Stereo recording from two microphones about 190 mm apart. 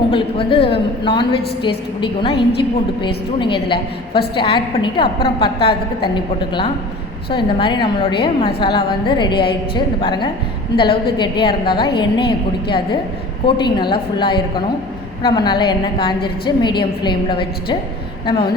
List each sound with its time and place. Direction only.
0.1 s a woman's voice: 25° left (ahead or behind)
3.4 s a woman's voice: 25° left (ahead or behind)
5.5 s a woman's voice: 60° left (ahead or behind)
6.1 s a woman's voice: 25° left (ahead or behind)